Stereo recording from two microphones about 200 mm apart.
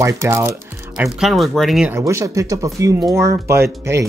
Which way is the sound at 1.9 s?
15° right (ahead or behind).